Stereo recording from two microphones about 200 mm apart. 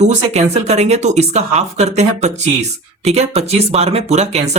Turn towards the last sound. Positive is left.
turn(degrees=-35)  # may be behind; listen again after turning